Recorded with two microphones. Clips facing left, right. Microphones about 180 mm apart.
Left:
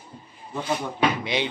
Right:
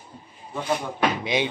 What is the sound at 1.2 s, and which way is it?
Speech, 15° right (ahead or behind).